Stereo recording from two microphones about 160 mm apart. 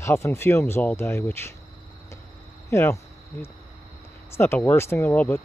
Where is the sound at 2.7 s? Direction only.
15° left (ahead or behind).